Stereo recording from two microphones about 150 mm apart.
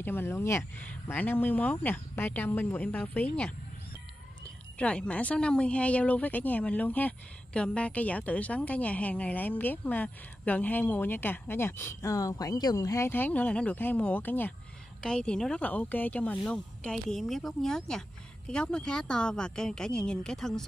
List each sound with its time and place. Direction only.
0.0 s a woman's voice: 15° left (ahead or behind)
4.7 s a woman's voice: 5° left (ahead or behind)